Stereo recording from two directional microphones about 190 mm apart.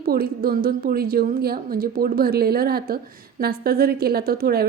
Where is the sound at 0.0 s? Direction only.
50° right (ahead or behind).